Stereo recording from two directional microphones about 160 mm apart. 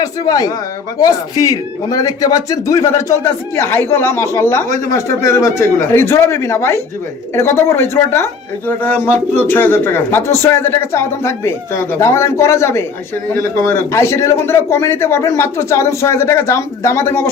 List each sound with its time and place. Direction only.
0.0 s speech: 20° left (ahead or behind)
13.9 s speech: 15° left (ahead or behind)